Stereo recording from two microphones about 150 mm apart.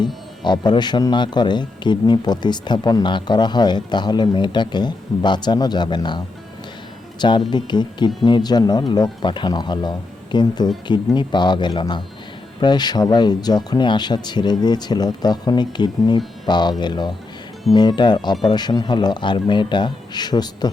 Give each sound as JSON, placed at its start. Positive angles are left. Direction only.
{"t": 0.0, "sound": "speech", "side_deg": 30}